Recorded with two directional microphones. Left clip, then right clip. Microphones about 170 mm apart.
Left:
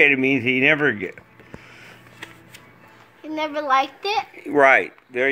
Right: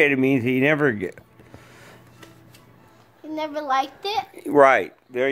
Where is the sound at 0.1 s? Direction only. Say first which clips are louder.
Left 2 dB; 35° right (ahead or behind).